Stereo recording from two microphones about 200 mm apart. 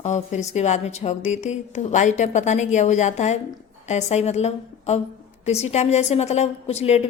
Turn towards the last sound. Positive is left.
turn(degrees=30)  # may be behind; listen again after turning